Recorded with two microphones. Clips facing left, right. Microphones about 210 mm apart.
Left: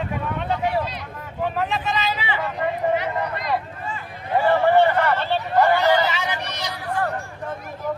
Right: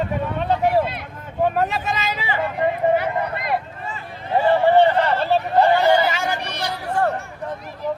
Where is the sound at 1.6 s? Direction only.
45° right (ahead or behind).